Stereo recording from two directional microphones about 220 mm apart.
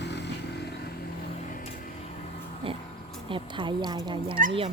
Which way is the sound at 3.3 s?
20° right (ahead or behind).